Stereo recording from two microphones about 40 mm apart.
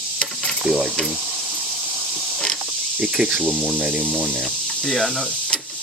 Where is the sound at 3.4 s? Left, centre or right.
Right.